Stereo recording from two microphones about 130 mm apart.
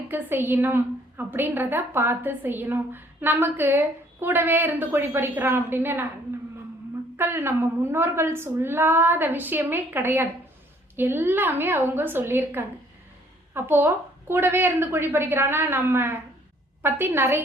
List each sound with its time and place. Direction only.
0.1 s a woman's voice: 15° right (ahead or behind)
7.2 s a woman's voice: 20° right (ahead or behind)